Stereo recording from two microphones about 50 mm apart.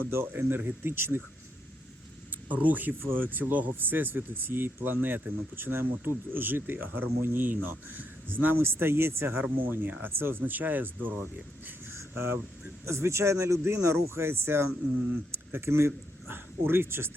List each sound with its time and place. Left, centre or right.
0.1 s speech: right
2.5 s speech: right
3.0 s speech: right
9.4 s speech: right
10.0 s speech: right
12.1 s speech: right
12.8 s speech: right